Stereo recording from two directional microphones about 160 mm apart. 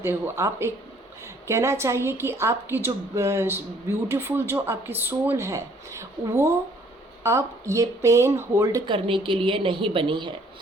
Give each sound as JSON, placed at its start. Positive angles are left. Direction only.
{"t": 0.0, "sound": "a woman's voice", "side_deg": -15}
{"t": 8.9, "sound": "a woman's voice", "side_deg": -30}